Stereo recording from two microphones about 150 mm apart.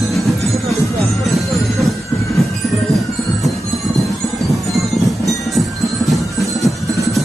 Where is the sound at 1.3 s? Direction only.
Centre (ahead or behind).